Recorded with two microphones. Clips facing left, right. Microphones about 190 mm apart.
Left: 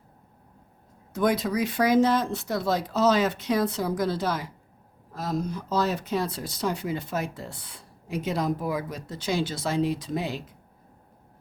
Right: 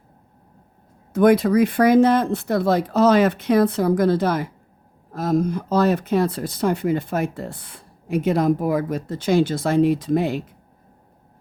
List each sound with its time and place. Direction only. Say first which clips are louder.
1.1 s speech: right 9 dB; 60° right (ahead or behind)